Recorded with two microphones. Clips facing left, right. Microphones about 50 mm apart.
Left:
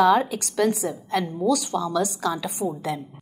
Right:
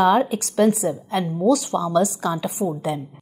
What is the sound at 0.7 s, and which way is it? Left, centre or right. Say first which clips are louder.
A woman's voice: right 2 dB; centre.